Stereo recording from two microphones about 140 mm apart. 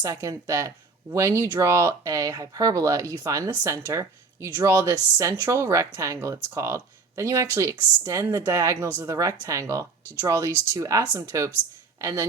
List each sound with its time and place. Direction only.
0.0 s a woman's voice: 25° right (ahead or behind)